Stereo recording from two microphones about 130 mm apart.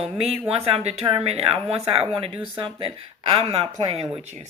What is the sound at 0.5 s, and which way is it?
Speech, 50° right (ahead or behind).